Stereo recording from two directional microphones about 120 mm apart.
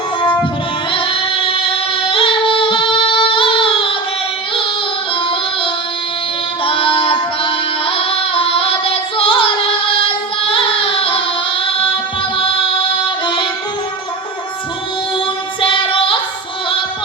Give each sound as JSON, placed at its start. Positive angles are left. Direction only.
{"t": 0.9, "sound": "female singing", "side_deg": 50}
{"t": 6.7, "sound": "singing", "side_deg": 45}
{"t": 10.4, "sound": "music", "side_deg": 50}
{"t": 13.2, "sound": "music", "side_deg": 45}
{"t": 15.6, "sound": "child singing", "side_deg": 45}